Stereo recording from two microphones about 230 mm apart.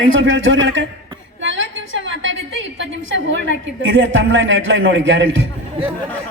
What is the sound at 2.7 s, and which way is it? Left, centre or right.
A woman's voice, right.